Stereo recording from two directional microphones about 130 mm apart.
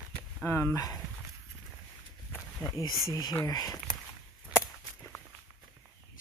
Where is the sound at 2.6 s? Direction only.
30° left (ahead or behind).